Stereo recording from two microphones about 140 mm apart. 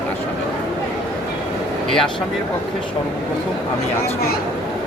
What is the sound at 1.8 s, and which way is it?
Speech, 5° left (ahead or behind).